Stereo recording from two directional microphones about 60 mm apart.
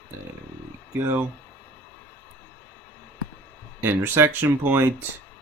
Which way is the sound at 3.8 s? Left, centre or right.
Right.